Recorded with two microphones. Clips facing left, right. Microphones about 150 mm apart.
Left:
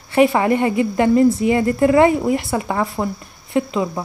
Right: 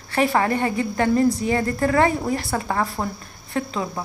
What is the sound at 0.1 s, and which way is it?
A woman's voice, 20° left (ahead or behind).